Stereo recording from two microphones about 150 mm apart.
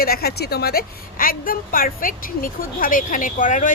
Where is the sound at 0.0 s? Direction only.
90° left.